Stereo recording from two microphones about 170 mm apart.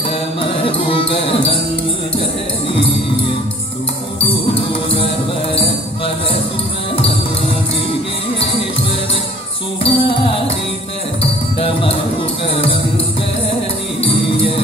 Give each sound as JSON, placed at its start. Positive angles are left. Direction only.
{"t": 9.8, "sound": "music", "side_deg": 35}